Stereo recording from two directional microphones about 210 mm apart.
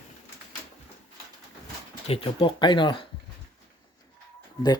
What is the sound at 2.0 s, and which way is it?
Speech, 25° left (ahead or behind).